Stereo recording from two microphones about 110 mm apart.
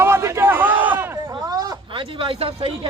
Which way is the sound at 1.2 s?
35° right (ahead or behind).